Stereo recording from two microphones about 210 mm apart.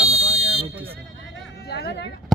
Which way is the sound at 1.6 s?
50° left (ahead or behind).